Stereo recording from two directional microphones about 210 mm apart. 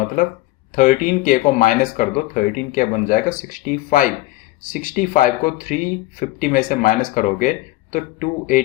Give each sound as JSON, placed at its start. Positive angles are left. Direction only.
{"t": 0.8, "sound": "speech", "side_deg": 40}